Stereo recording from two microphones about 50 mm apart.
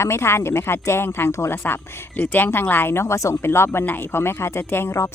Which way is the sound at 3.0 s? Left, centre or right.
Left.